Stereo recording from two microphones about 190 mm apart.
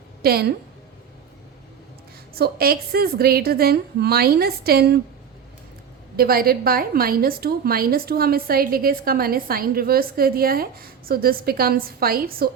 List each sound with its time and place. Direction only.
0.2 s a woman's voice: 55° right (ahead or behind)
2.3 s a woman's voice: 55° right (ahead or behind)
6.1 s a woman's voice: 50° right (ahead or behind)